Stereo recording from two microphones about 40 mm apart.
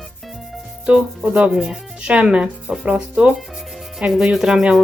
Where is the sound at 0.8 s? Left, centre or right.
Right.